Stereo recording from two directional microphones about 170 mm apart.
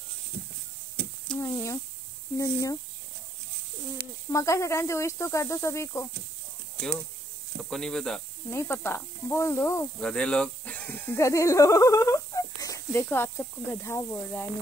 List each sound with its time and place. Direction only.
1.3 s a sound: 5° left (ahead or behind)
2.3 s speech: 20° left (ahead or behind)
4.3 s speech: 15° left (ahead or behind)
7.7 s speech: 5° left (ahead or behind)
8.5 s speech: 15° left (ahead or behind)